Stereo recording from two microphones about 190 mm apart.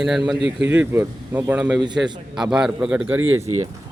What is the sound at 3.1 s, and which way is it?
Speech, 90° right.